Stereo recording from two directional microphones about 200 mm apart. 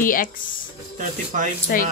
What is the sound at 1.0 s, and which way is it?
Speech, 40° right (ahead or behind).